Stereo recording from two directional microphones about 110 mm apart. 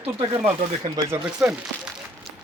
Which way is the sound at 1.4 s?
10° right (ahead or behind).